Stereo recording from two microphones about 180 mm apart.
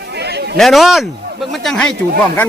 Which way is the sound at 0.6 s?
Centre (ahead or behind).